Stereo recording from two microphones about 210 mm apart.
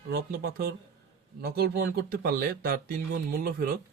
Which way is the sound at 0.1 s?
45° right (ahead or behind).